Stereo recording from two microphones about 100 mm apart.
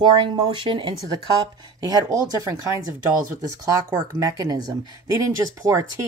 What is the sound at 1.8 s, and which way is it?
Speech, 40° right (ahead or behind).